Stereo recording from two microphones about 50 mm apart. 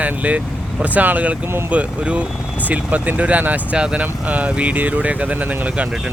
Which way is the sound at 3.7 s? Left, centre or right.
Right.